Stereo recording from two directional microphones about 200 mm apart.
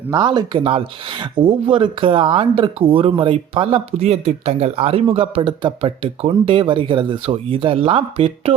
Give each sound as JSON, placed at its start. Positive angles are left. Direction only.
{"t": 0.1, "sound": "speech", "side_deg": -20}